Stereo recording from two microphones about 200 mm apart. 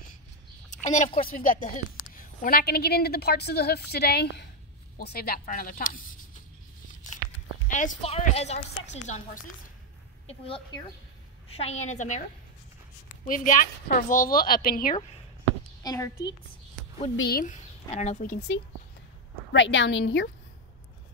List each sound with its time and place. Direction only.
0.8 s a woman's voice: 35° left (ahead or behind)
7.6 s a woman's voice: 40° left (ahead or behind)
13.2 s a woman's voice: 40° left (ahead or behind)
15.8 s a child's voice: 20° left (ahead or behind)
17.2 s a woman's voice: 45° left (ahead or behind)
19.5 s a woman's voice: 65° left (ahead or behind)